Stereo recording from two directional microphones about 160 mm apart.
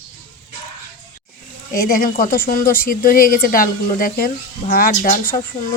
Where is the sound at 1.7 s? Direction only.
65° left (ahead or behind).